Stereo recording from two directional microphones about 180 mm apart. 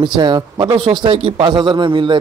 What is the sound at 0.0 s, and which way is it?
A man's voice, 25° right (ahead or behind).